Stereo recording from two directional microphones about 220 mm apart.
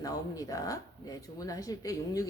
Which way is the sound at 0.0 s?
15° left (ahead or behind).